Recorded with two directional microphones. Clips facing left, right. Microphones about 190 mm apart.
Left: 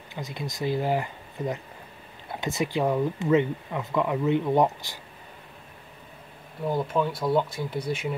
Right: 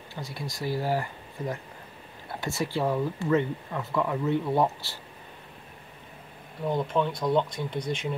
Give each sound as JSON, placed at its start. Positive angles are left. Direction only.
{"t": 0.1, "sound": "speech", "side_deg": 20}
{"t": 6.7, "sound": "speech", "side_deg": 5}